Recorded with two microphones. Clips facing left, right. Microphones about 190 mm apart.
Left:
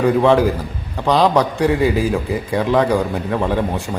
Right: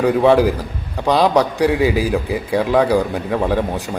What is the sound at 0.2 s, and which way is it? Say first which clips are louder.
A man's voice: right 1 dB; 10° right (ahead or behind).